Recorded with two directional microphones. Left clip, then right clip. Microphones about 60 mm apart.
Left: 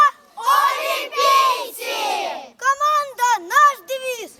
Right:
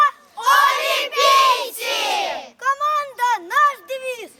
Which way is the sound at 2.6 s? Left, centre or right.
Centre.